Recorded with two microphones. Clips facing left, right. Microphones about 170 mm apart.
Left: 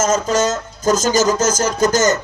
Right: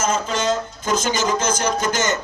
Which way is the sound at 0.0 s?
45° left (ahead or behind).